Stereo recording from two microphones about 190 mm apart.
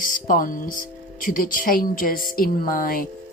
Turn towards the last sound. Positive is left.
turn(degrees=50)  # may be behind; listen again after turning